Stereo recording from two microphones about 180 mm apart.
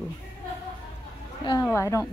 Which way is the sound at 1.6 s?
15° left (ahead or behind).